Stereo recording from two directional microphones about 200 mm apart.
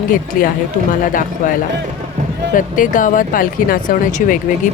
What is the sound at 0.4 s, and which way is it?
Speech, 45° left (ahead or behind).